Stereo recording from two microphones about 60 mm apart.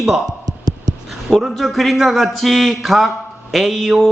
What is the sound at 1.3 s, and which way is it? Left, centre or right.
Speech, centre.